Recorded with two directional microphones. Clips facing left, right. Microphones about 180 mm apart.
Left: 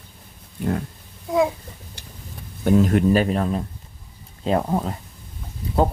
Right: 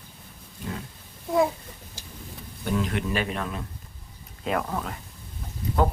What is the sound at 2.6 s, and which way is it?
Speech, 45° left (ahead or behind).